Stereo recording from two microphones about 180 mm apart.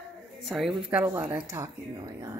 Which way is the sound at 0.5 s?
Centre (ahead or behind).